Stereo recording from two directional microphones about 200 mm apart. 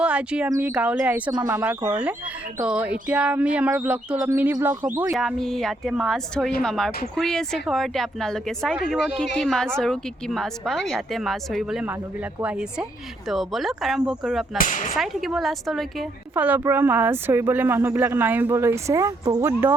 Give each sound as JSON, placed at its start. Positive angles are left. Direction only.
{"t": 0.0, "sound": "a woman's voice", "side_deg": -5}
{"t": 14.6, "sound": "speech", "side_deg": 40}
{"t": 14.9, "sound": "a woman's voice", "side_deg": 0}